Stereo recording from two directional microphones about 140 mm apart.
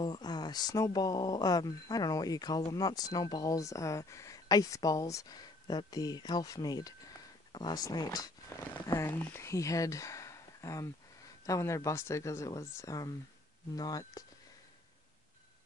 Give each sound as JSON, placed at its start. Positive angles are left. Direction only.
{"t": 0.0, "sound": "speech", "side_deg": 30}